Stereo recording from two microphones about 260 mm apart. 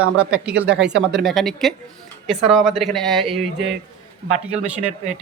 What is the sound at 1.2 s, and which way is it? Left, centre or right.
Speech, centre.